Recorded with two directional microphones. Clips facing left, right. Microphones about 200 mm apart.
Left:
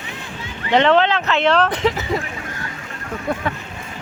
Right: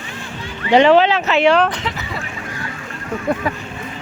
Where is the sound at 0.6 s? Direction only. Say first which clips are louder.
Right 4 dB; 10° right (ahead or behind).